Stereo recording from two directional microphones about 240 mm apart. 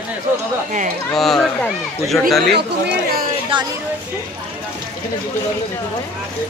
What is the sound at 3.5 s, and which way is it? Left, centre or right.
Speech, right.